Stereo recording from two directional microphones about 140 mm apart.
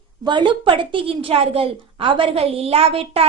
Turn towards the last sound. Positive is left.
turn(degrees=-45)  # may be behind; listen again after turning